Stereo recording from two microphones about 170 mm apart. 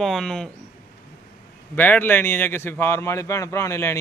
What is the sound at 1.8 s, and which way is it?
A man's voice, 10° left (ahead or behind).